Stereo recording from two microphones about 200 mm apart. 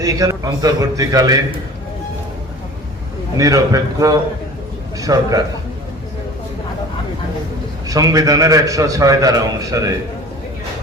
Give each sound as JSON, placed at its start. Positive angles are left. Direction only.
{"t": 0.0, "sound": "a man's voice", "side_deg": -15}
{"t": 3.3, "sound": "a man's voice", "side_deg": -15}
{"t": 7.9, "sound": "a man's voice", "side_deg": -20}